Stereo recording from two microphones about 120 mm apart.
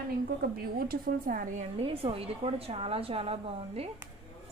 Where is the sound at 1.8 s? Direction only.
50° right (ahead or behind).